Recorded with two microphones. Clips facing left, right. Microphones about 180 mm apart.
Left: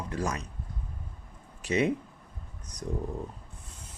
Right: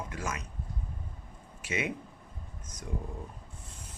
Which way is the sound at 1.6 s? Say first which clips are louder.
Left 7 dB; 35° left (ahead or behind).